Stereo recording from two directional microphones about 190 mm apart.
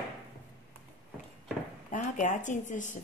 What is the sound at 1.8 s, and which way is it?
Speech, 40° left (ahead or behind).